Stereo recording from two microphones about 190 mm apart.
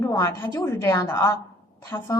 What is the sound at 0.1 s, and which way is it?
A woman's voice, 15° left (ahead or behind).